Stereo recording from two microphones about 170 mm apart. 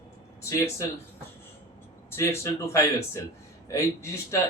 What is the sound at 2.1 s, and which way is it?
Speech, 15° left (ahead or behind).